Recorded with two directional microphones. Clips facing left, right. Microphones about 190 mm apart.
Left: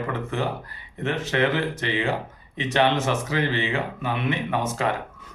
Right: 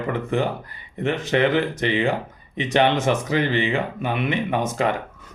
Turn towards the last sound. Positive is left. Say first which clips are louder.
# right 3 dB
turn(degrees=-15)  # may be behind; listen again after turning